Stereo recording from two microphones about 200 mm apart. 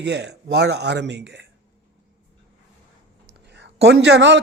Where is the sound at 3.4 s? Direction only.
60° right (ahead or behind).